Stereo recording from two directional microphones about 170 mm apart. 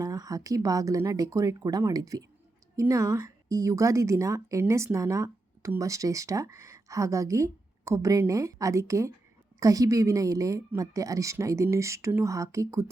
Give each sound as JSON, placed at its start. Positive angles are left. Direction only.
{"t": 0.0, "sound": "speech", "side_deg": -20}